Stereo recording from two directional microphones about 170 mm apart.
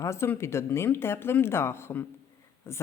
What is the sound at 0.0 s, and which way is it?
A woman's voice, 15° left (ahead or behind).